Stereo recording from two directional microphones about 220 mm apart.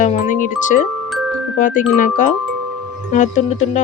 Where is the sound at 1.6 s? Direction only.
35° left (ahead or behind).